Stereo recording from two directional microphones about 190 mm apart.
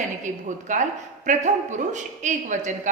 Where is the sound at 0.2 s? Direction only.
40° right (ahead or behind).